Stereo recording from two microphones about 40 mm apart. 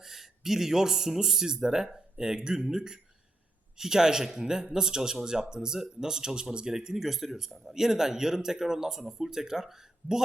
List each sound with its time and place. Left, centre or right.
0.0 s speech: centre